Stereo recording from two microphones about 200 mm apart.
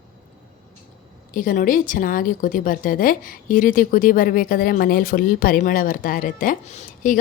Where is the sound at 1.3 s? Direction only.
45° left (ahead or behind).